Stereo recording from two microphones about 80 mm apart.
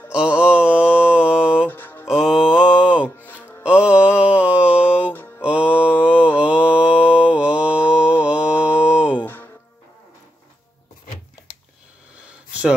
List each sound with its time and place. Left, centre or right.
0.1 s mantra: centre
1.7 s music: left
2.0 s music: centre
3.6 s mantra: centre
9.2 s music: left